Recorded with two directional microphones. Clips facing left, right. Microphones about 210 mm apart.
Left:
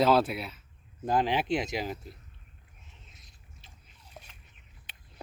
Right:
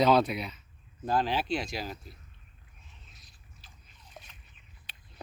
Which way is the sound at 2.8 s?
25° left (ahead or behind).